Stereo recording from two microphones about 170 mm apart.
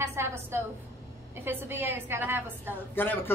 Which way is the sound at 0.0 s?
15° right (ahead or behind).